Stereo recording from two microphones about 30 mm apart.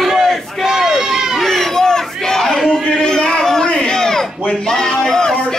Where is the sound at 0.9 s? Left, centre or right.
Centre.